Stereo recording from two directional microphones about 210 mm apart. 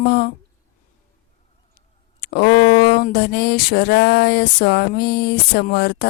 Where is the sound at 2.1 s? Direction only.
50° left (ahead or behind).